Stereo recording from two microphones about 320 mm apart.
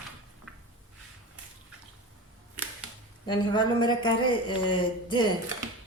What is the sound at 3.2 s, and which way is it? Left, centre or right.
Speech, centre.